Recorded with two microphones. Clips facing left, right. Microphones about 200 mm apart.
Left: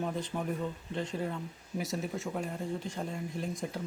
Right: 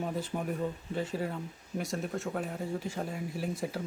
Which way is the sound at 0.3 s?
20° right (ahead or behind).